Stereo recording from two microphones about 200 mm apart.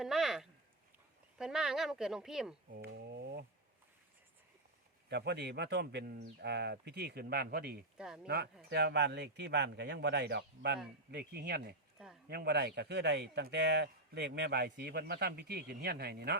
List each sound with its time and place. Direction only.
0.0 s a sound: centre (ahead or behind)
1.4 s speech: 5° right (ahead or behind)
2.8 s a sound: 55° right (ahead or behind)
5.0 s speech: 55° right (ahead or behind)
7.9 s speech: 5° right (ahead or behind)
8.7 s speech: 55° right (ahead or behind)